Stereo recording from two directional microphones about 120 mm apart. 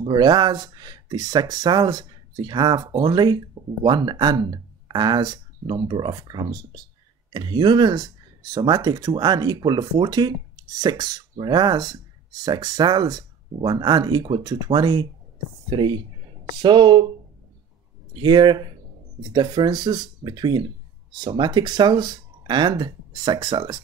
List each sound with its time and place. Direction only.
0.0 s speech: 40° right (ahead or behind)
18.1 s speech: 40° right (ahead or behind)